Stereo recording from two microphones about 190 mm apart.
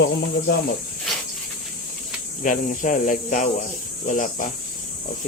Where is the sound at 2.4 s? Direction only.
45° left (ahead or behind).